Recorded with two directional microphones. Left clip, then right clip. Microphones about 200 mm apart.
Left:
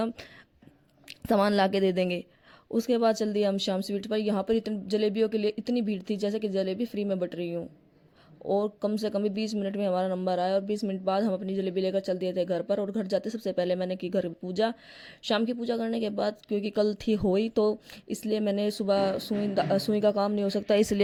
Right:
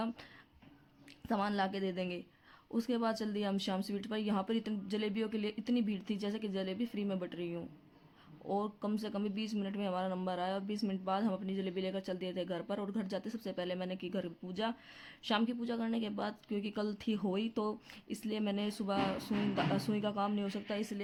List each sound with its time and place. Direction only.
1.3 s speech: 40° left (ahead or behind)